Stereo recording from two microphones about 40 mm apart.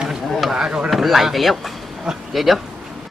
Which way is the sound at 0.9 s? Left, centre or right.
Centre.